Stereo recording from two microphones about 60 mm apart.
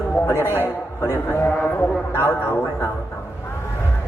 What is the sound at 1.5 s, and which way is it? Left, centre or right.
A woman's voice, left.